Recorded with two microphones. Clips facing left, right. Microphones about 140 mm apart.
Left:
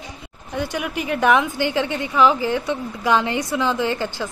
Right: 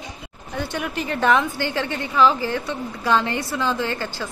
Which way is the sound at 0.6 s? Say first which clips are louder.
Left 2 dB; 10° left (ahead or behind).